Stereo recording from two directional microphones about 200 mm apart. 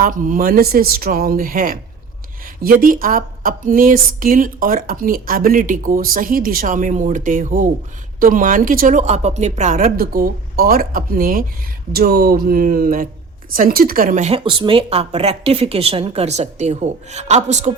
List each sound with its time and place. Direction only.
0.0 s a woman's voice: 40° right (ahead or behind)